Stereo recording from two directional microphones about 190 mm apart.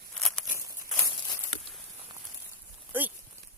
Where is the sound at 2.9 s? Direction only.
10° right (ahead or behind).